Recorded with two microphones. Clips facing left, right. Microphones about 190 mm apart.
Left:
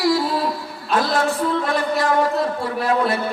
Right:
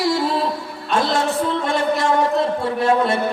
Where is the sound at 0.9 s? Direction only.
25° right (ahead or behind).